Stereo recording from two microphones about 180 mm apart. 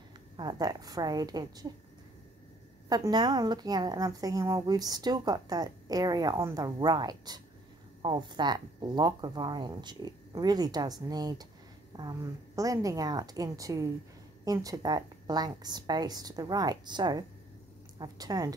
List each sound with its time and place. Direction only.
0.4 s a woman's voice: 20° right (ahead or behind)
2.9 s a woman's voice: 20° right (ahead or behind)